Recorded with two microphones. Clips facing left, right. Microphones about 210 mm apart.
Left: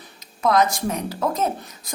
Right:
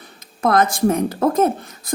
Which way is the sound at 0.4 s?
50° right (ahead or behind).